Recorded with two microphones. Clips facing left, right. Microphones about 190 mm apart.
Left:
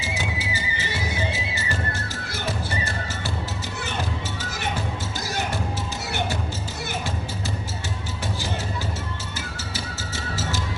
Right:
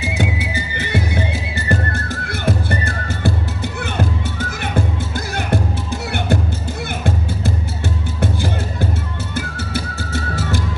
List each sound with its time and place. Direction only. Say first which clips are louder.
0.1 s music: right 6 dB; 60° right (ahead or behind)